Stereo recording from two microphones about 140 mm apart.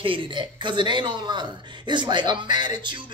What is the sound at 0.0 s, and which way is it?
Speech, 40° right (ahead or behind).